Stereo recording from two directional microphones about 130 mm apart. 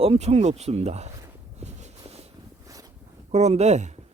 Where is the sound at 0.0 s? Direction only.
55° right (ahead or behind).